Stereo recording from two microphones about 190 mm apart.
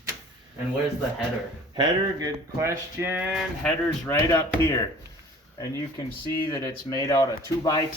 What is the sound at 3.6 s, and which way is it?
Speech, 10° left (ahead or behind).